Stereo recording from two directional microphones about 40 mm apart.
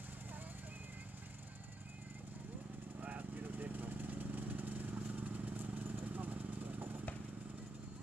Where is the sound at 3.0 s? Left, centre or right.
Right.